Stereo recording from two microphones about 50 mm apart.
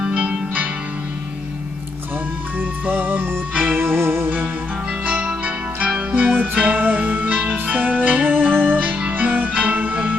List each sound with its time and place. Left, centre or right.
0.0 s music: right
2.6 s music: right
3.9 s music: right
5.2 s music: right